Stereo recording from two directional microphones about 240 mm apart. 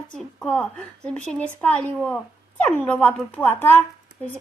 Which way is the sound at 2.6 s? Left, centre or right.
Centre.